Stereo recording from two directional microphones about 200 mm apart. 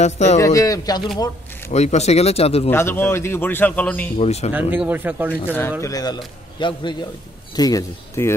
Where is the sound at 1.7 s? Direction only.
35° left (ahead or behind).